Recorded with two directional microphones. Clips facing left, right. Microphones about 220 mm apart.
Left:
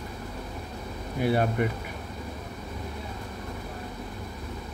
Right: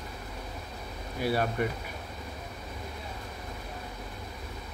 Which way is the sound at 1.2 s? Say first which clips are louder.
Left 4 dB; 20° left (ahead or behind).